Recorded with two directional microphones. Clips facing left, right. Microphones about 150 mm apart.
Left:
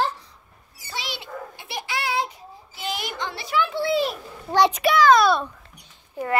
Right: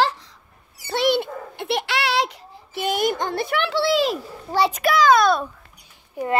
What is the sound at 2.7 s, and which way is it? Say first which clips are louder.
A child's voice: right 9 dB; 55° right (ahead or behind).